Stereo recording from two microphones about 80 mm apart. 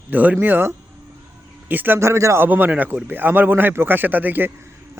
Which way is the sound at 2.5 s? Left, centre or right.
Right.